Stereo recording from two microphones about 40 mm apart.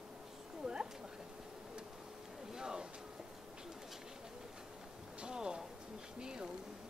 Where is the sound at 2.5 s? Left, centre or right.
Centre.